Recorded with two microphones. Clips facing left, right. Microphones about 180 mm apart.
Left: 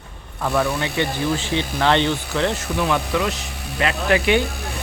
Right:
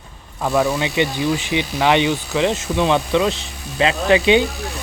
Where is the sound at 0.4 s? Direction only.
15° right (ahead or behind).